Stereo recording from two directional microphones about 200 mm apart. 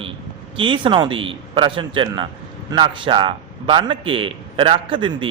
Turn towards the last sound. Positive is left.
turn(degrees=-25)  # may be behind; listen again after turning